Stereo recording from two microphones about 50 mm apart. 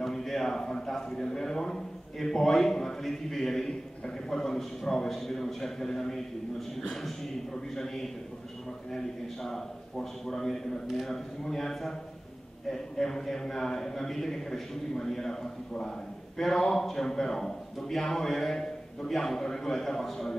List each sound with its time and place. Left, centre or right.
0.0 s a man's voice: centre